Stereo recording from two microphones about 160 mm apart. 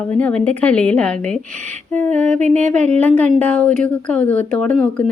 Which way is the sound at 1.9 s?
50° right (ahead or behind).